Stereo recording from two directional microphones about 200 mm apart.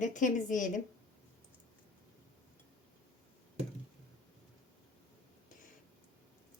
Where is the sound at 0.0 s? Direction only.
40° left (ahead or behind).